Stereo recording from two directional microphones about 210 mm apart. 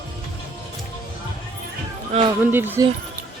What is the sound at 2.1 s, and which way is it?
Music, 25° right (ahead or behind).